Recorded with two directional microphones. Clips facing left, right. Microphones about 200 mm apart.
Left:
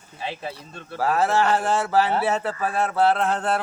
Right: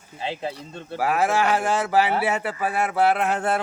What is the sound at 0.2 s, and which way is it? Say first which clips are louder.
Speech: right 2 dB; 20° right (ahead or behind).